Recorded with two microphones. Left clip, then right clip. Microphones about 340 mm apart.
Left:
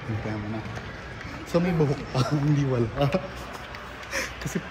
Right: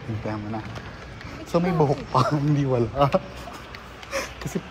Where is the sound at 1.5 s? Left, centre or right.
Centre.